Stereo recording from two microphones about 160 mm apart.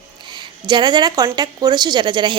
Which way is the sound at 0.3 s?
30° right (ahead or behind).